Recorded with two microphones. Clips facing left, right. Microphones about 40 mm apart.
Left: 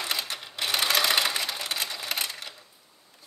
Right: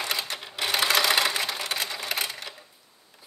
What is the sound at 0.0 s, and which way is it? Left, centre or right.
Sewing machine, centre.